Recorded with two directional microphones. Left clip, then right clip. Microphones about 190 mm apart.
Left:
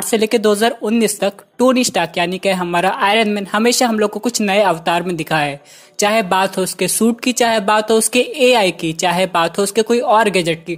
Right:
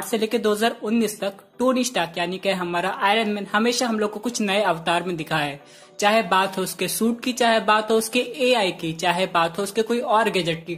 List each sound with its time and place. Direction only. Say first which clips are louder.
0.1 s speech: left 8 dB; 40° left (ahead or behind)